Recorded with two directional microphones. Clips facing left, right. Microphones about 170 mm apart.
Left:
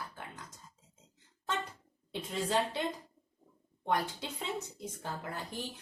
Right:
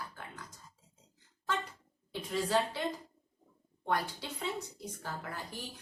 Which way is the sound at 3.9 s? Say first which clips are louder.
Left 1 dB; 20° left (ahead or behind).